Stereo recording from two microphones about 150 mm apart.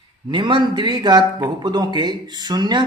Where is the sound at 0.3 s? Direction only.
30° right (ahead or behind).